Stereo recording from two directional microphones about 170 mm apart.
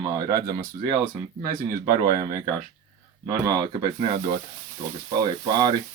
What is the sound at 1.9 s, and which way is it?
Speech, 20° right (ahead or behind).